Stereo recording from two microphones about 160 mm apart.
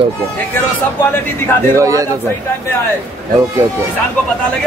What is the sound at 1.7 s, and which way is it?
Speech, 20° right (ahead or behind).